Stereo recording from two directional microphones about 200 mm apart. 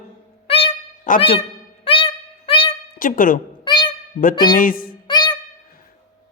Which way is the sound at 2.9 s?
45° left (ahead or behind).